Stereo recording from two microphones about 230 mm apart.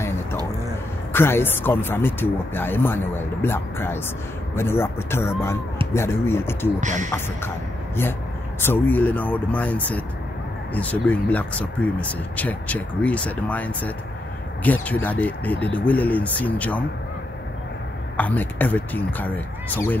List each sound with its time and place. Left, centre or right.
1.1 s speech: centre
6.8 s speech: right
7.1 s speech: centre
18.1 s speech: centre